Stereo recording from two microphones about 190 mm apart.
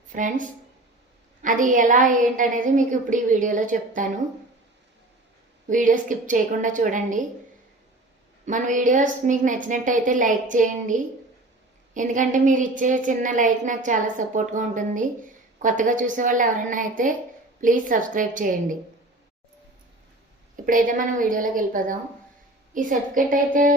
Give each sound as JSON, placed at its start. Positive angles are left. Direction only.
{"t": 0.1, "sound": "a woman's voice", "side_deg": -45}
{"t": 5.6, "sound": "a woman's voice", "side_deg": -45}
{"t": 8.4, "sound": "a woman's voice", "side_deg": -40}
{"t": 20.7, "sound": "a woman's voice", "side_deg": -45}